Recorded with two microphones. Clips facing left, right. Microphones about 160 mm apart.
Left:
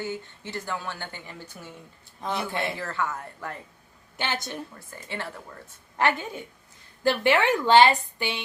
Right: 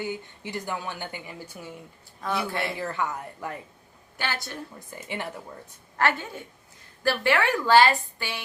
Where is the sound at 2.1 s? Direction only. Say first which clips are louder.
Right 1 dB; 20° left (ahead or behind).